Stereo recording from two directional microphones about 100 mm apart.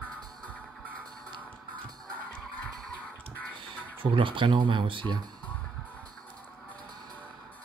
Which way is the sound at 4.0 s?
60° right (ahead or behind).